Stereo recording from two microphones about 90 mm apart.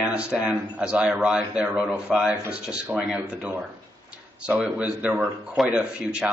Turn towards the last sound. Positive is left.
turn(degrees=-5)  # may be behind; listen again after turning